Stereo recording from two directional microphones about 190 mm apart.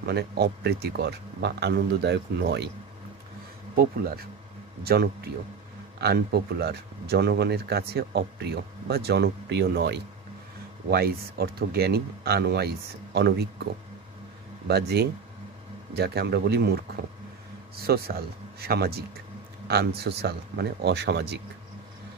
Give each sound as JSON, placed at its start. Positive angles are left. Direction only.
{"t": 0.0, "sound": "speech", "side_deg": -60}
{"t": 3.7, "sound": "speech", "side_deg": -50}
{"t": 14.7, "sound": "speech", "side_deg": -60}